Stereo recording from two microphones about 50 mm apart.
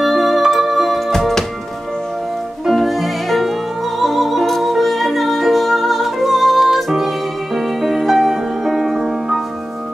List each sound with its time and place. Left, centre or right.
0.0 s music: centre
2.7 s music: centre